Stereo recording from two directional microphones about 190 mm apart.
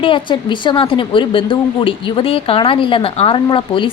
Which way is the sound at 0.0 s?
25° left (ahead or behind).